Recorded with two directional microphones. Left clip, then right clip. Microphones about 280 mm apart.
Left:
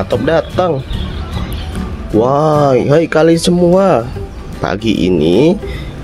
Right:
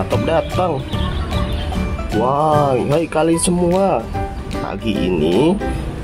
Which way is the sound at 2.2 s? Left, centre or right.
Left.